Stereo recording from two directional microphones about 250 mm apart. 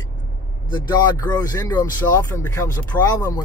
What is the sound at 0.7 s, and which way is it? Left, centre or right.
Speech, centre.